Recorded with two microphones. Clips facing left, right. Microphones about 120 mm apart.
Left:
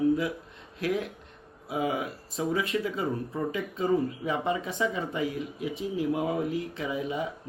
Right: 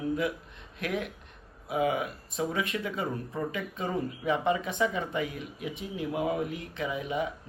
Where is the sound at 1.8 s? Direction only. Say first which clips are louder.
Right 1 dB; 30° left (ahead or behind).